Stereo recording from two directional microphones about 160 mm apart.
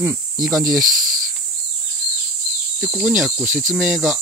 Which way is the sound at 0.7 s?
Centre (ahead or behind).